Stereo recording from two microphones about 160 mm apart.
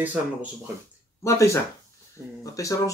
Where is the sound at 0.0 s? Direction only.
10° right (ahead or behind).